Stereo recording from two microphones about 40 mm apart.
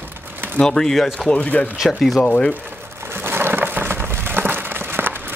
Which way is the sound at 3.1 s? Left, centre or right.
Right.